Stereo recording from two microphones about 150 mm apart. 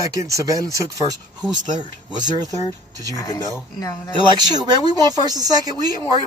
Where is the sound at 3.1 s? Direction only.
20° left (ahead or behind).